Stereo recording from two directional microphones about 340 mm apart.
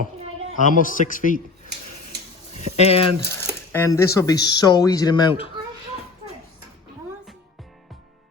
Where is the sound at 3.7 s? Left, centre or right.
Centre.